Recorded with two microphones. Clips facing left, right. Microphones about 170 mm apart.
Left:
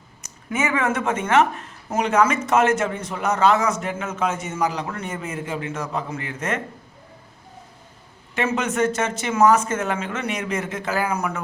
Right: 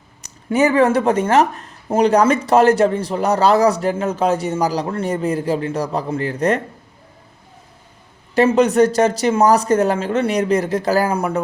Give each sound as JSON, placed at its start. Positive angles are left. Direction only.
{"t": 0.5, "sound": "speech", "side_deg": -35}
{"t": 8.4, "sound": "speech", "side_deg": -35}